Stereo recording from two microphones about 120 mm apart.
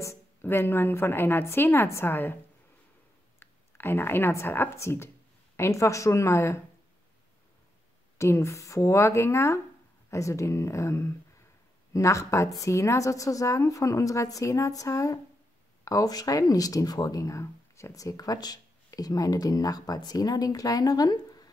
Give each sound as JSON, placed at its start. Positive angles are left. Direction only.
{"t": 0.0, "sound": "a woman's voice", "side_deg": 20}
{"t": 3.3, "sound": "a woman's voice", "side_deg": 20}
{"t": 8.2, "sound": "a woman's voice", "side_deg": 25}